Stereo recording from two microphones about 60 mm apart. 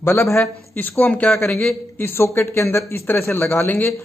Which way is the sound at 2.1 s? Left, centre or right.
Left.